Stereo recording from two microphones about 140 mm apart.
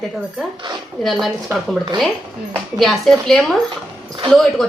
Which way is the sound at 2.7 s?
Centre (ahead or behind).